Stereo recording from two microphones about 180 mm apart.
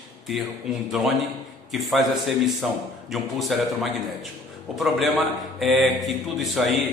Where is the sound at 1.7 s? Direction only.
Centre (ahead or behind).